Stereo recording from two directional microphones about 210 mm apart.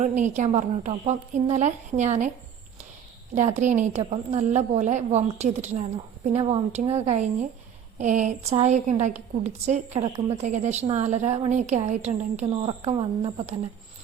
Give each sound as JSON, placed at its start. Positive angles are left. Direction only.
{"t": 0.0, "sound": "a woman's voice", "side_deg": -35}
{"t": 3.3, "sound": "a woman's voice", "side_deg": -35}